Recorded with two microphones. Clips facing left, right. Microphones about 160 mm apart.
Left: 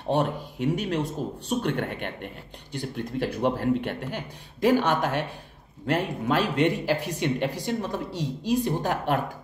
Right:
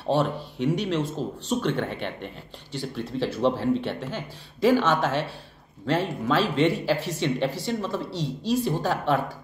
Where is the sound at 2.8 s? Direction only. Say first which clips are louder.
Right 1 dB; 15° left (ahead or behind).